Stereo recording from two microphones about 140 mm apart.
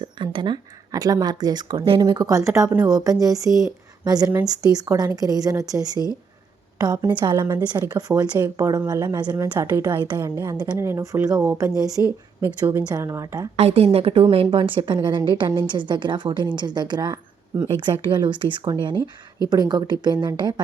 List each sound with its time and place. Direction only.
0.2 s a woman's voice: 35° right (ahead or behind)
13.6 s a woman's voice: 45° right (ahead or behind)